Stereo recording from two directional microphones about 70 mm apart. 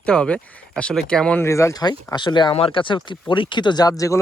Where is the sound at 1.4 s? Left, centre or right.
Left.